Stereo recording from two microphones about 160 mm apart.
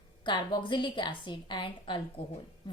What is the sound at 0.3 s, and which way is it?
A woman's voice, 30° left (ahead or behind).